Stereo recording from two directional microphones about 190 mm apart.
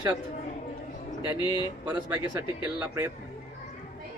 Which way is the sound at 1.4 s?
25° left (ahead or behind).